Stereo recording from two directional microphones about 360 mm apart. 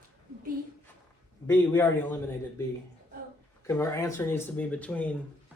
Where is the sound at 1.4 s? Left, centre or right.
Centre.